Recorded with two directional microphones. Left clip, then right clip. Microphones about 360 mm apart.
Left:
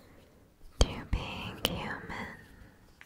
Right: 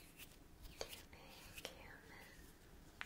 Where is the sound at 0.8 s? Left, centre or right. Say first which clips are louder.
Left 18 dB; left.